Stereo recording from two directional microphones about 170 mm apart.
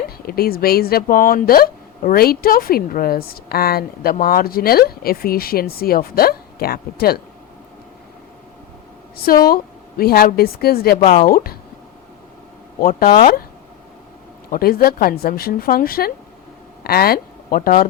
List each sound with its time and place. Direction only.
0.3 s speech: 60° left (ahead or behind)
9.1 s speech: 60° left (ahead or behind)
11.0 s a woman's voice: 40° left (ahead or behind)
11.3 s speech: 55° left (ahead or behind)
12.8 s speech: 55° left (ahead or behind)
13.1 s a woman's voice: 40° left (ahead or behind)
14.5 s speech: 60° left (ahead or behind)